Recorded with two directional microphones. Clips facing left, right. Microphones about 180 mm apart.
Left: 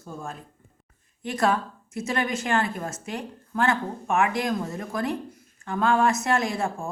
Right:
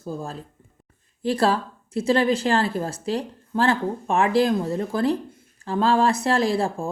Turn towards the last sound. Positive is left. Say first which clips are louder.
# right 5 dB
turn(degrees=-30)  # may be behind; listen again after turning